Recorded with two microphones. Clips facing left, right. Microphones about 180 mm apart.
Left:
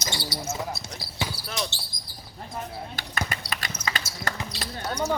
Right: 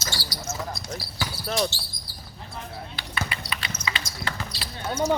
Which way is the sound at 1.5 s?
45° right (ahead or behind).